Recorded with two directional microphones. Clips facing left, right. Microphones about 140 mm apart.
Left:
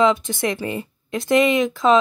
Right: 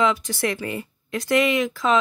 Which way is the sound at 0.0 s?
25° left (ahead or behind).